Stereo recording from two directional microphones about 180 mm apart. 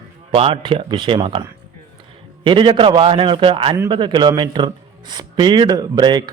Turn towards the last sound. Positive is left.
turn(degrees=-25)  # may be behind; listen again after turning